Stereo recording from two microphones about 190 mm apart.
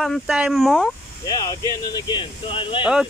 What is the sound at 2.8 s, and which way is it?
Speech, 5° right (ahead or behind).